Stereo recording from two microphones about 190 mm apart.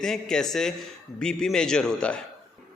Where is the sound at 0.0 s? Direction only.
5° left (ahead or behind).